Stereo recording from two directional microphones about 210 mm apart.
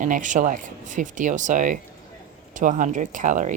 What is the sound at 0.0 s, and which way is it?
Speech, 35° right (ahead or behind).